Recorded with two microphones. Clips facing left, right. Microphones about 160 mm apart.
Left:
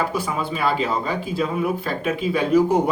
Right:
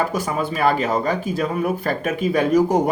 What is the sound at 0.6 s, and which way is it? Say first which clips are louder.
Speech: right 4 dB; 45° right (ahead or behind).